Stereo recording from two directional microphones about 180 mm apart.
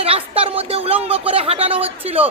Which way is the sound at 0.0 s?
30° right (ahead or behind).